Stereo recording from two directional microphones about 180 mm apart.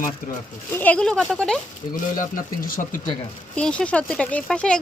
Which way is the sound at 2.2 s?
45° left (ahead or behind).